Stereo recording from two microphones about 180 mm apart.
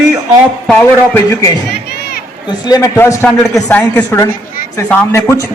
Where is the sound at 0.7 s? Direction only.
15° left (ahead or behind).